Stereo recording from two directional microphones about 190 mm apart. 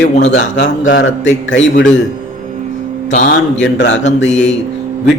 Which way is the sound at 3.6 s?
70° left (ahead or behind).